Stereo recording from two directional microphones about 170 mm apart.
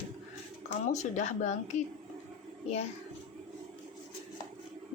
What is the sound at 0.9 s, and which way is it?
Speech, 45° left (ahead or behind).